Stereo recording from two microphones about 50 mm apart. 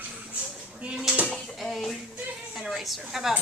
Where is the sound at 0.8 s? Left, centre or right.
Centre.